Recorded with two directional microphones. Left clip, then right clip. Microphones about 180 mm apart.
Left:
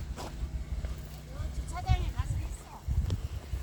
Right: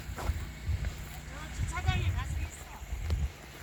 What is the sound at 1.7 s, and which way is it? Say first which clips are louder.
Vehicle: right 1 dB; 65° left (ahead or behind).